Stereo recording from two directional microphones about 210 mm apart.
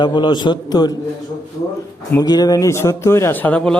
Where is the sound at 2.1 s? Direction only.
20° left (ahead or behind).